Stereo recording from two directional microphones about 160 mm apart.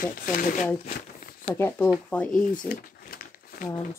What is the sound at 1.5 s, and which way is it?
Speech, 15° left (ahead or behind).